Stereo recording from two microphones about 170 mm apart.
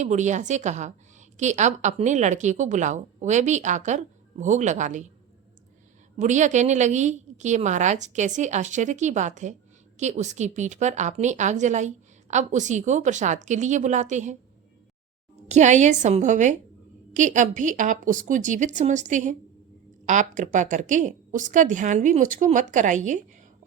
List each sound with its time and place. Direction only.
0.0 s a woman's voice: 45° right (ahead or behind)
6.1 s a woman's voice: 45° right (ahead or behind)
15.4 s a woman's voice: 45° right (ahead or behind)